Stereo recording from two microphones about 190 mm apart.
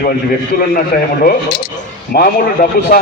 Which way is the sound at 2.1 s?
55° left (ahead or behind).